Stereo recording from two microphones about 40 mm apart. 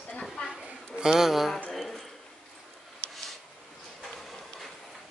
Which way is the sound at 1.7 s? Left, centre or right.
Centre.